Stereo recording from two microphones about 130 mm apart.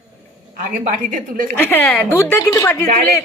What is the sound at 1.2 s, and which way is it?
Speech, 90° right.